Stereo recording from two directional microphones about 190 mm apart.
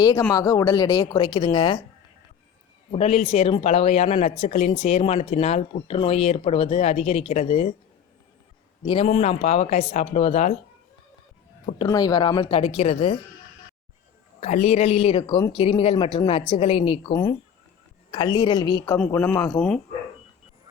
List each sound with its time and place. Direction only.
0.0 s speech: 20° left (ahead or behind)
2.9 s speech: 35° left (ahead or behind)
8.8 s speech: 25° left (ahead or behind)
11.9 s speech: 20° left (ahead or behind)
14.4 s speech: 35° left (ahead or behind)
17.1 s speech: 15° left (ahead or behind)
18.9 s speech: 10° left (ahead or behind)